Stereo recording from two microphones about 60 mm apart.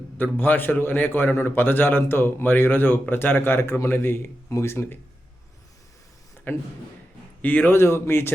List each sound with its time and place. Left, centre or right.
0.2 s a man's voice: left
6.5 s a man's voice: left
7.7 s speech: left